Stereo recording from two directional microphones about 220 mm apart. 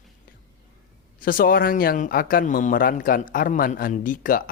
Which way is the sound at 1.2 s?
40° left (ahead or behind).